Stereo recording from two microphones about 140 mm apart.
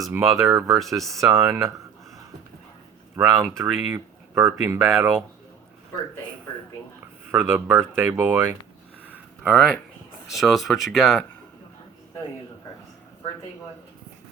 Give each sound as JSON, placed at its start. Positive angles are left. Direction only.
{"t": 0.0, "sound": "speech", "side_deg": -20}
{"t": 3.2, "sound": "speech", "side_deg": -15}
{"t": 7.3, "sound": "speech", "side_deg": -15}
{"t": 9.4, "sound": "speech", "side_deg": 0}